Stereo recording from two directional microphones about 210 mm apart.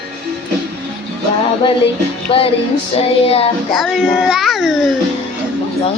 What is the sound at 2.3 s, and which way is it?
Music, 25° left (ahead or behind).